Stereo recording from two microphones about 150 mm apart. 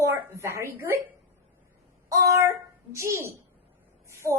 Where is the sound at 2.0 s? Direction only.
20° right (ahead or behind).